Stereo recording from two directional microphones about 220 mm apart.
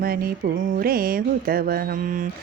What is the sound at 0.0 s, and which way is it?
Mantra, 40° right (ahead or behind).